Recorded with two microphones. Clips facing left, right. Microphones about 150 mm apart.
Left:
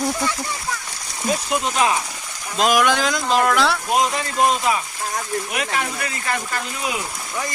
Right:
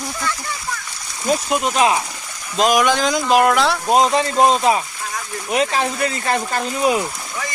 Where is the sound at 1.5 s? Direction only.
20° right (ahead or behind).